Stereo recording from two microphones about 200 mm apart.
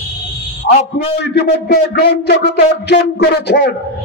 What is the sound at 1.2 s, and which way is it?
A man's voice, 55° left (ahead or behind).